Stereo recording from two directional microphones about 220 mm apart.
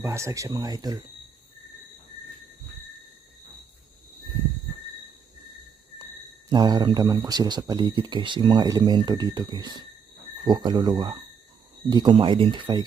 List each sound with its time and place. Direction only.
0.0 s speech: 15° right (ahead or behind)
6.5 s speech: 20° right (ahead or behind)